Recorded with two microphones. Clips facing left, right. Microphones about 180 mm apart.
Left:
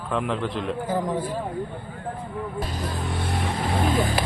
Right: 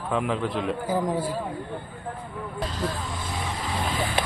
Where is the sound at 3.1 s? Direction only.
60° left (ahead or behind).